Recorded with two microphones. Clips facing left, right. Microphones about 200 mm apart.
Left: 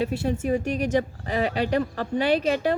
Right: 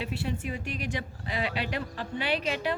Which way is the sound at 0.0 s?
45° left (ahead or behind).